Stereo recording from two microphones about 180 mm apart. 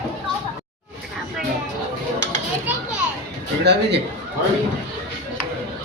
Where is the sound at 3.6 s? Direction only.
70° right (ahead or behind).